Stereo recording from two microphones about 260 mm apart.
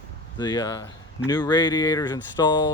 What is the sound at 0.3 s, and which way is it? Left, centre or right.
Speech, centre.